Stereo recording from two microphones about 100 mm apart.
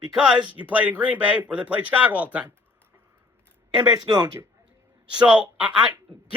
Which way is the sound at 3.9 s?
45° right (ahead or behind).